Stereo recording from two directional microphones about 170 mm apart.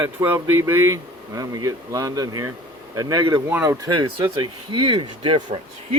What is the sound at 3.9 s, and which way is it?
Speech, 25° right (ahead or behind).